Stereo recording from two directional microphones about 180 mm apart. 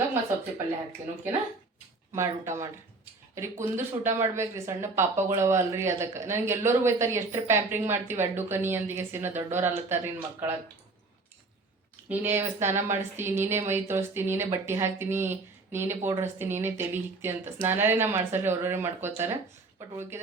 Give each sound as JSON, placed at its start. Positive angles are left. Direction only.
{"t": 2.1, "sound": "speech", "side_deg": -15}
{"t": 12.0, "sound": "speech", "side_deg": -10}